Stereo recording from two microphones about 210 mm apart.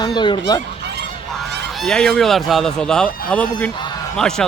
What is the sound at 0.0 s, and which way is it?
Goose, 20° left (ahead or behind).